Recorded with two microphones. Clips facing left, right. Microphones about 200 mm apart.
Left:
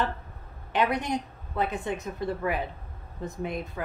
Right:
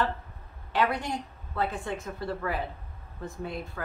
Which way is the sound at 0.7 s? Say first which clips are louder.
Left 2 dB; 20° left (ahead or behind).